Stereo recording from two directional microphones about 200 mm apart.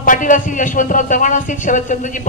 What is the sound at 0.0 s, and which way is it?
Speech, 40° left (ahead or behind).